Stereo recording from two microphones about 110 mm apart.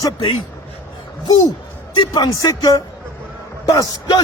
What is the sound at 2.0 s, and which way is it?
Speech, 40° left (ahead or behind).